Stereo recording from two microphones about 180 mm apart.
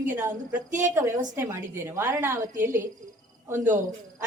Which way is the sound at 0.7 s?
45° right (ahead or behind).